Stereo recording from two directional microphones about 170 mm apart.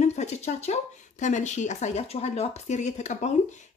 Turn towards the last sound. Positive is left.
turn(degrees=45)  # may be behind; listen again after turning